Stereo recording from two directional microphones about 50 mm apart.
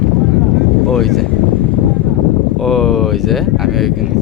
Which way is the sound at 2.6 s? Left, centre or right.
Centre.